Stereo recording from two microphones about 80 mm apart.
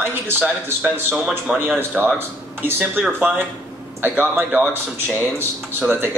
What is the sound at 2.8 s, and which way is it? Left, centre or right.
Speech, centre.